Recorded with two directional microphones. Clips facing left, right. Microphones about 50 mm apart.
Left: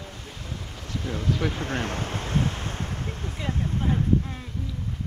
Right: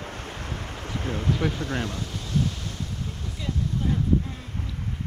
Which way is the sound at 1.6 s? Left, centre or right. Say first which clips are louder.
Left 1 dB; left.